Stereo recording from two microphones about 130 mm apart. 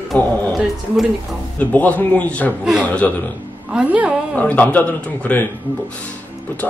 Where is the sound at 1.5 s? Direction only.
10° left (ahead or behind).